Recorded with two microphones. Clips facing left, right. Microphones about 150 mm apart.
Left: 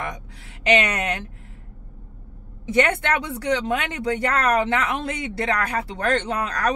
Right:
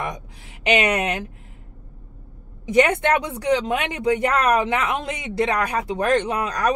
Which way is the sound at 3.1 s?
25° right (ahead or behind).